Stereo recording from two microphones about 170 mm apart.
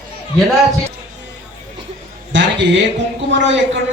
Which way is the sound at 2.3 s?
90° right.